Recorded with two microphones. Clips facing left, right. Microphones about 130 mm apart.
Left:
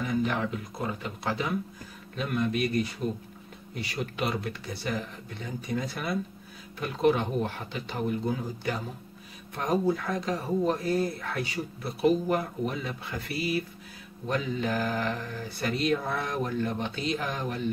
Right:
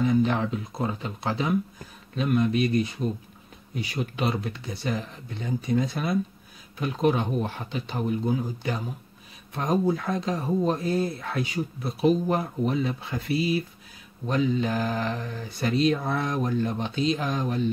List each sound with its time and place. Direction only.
0.0 s speech: 30° right (ahead or behind)